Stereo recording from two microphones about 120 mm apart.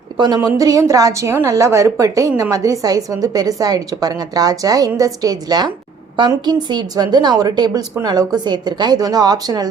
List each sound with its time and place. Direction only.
0.3 s a woman's voice: 30° right (ahead or behind)